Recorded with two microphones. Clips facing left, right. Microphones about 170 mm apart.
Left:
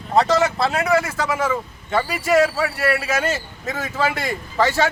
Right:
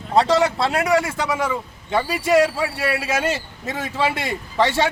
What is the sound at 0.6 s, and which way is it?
A man's voice, 20° right (ahead or behind).